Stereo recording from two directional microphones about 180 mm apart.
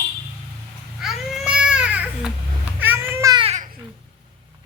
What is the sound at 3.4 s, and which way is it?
Babbling, 35° right (ahead or behind).